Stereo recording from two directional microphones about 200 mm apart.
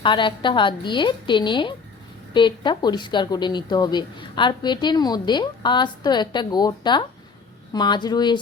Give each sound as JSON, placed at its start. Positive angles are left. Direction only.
{"t": 0.0, "sound": "a woman's voice", "side_deg": 25}